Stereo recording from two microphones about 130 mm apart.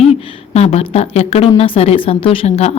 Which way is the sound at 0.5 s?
55° left (ahead or behind).